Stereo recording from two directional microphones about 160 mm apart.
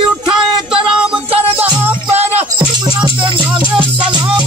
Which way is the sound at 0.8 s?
5° right (ahead or behind).